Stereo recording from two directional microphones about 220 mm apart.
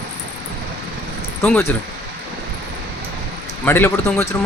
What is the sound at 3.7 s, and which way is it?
Speech, 10° left (ahead or behind).